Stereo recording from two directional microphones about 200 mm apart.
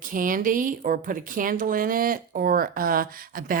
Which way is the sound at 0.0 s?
45° right (ahead or behind).